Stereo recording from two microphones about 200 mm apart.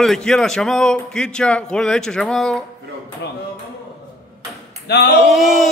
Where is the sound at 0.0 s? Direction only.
Centre (ahead or behind).